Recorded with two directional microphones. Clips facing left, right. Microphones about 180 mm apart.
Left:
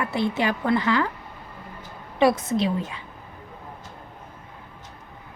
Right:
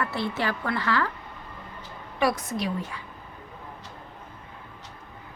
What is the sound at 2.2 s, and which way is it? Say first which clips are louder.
Speech: left 6 dB; 25° left (ahead or behind).